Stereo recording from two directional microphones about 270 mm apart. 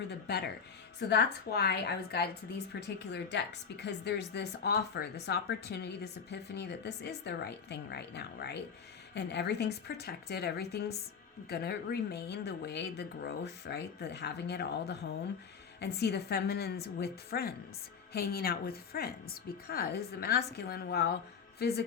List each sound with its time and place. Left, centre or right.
0.1 s a woman's voice: left